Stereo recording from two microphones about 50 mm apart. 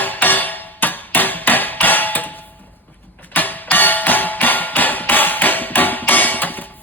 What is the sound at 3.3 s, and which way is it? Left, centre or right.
Music, left.